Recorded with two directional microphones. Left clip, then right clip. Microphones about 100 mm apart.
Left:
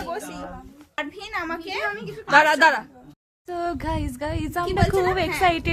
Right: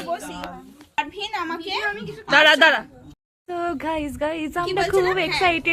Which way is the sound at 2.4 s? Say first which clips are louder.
Right 3 dB; 20° right (ahead or behind).